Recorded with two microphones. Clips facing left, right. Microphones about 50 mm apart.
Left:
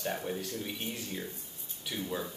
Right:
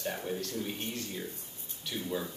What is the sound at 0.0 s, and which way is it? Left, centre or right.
A man's voice, centre.